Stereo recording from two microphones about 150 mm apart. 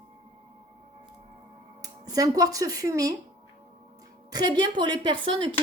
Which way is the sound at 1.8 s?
25° right (ahead or behind).